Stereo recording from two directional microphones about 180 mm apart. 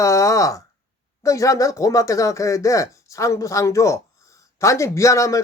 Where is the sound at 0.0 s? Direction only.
15° left (ahead or behind).